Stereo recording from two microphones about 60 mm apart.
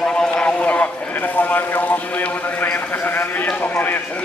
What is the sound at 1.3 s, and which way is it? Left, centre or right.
Clip-clop, left.